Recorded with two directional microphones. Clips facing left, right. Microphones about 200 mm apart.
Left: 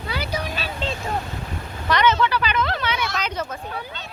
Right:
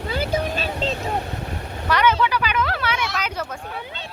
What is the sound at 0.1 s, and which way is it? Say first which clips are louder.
Vehicle: right 4 dB; 50° right (ahead or behind).